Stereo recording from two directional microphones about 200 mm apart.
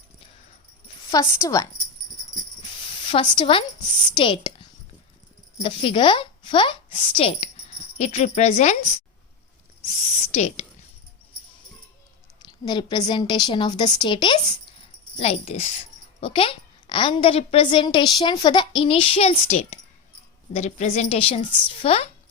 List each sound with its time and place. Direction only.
0.9 s a sound: 25° left (ahead or behind)
1.4 s speech: 15° left (ahead or behind)
3.0 s a woman's voice: 25° left (ahead or behind)
5.6 s a child's voice: 25° left (ahead or behind)
10.3 s speech: 35° left (ahead or behind)
12.5 s a child's voice: 20° left (ahead or behind)